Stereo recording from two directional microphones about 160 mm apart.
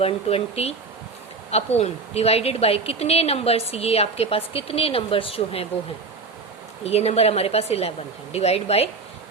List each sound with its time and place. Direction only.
0.0 s a woman's voice: 40° left (ahead or behind)
6.8 s a woman's voice: 40° left (ahead or behind)